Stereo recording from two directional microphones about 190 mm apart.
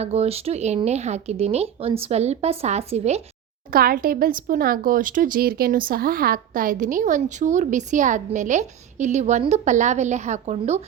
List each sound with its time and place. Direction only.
0.0 s speech: 35° right (ahead or behind)
3.7 s speech: 50° right (ahead or behind)